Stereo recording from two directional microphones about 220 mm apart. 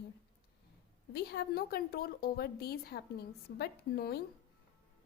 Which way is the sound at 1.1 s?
45° left (ahead or behind).